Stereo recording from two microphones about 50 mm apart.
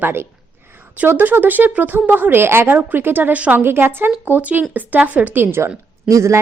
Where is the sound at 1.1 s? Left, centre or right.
Right.